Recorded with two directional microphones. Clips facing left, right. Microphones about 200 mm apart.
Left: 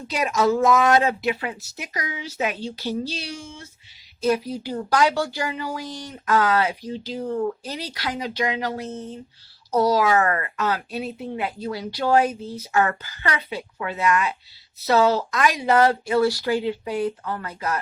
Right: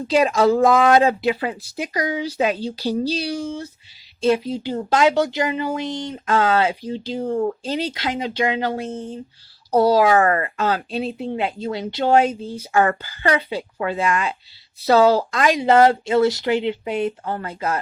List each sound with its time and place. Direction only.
0.2 s speech: 30° right (ahead or behind)